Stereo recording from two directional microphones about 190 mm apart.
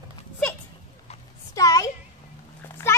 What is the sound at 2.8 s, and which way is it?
Clip-clop, 15° left (ahead or behind).